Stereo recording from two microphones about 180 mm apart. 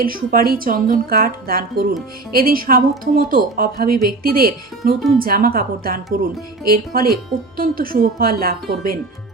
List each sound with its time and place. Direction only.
0.0 s speech: 50° right (ahead or behind)